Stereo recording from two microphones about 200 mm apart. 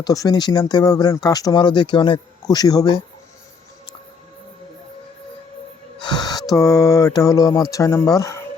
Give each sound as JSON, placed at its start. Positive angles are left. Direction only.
{"t": 0.0, "sound": "speech", "side_deg": 20}
{"t": 6.0, "sound": "speech", "side_deg": 20}